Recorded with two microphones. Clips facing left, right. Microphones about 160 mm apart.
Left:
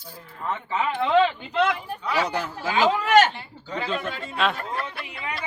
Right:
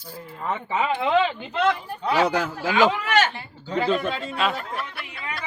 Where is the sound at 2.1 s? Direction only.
90° right.